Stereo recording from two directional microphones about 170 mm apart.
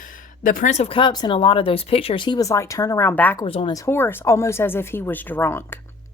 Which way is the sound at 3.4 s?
30° left (ahead or behind).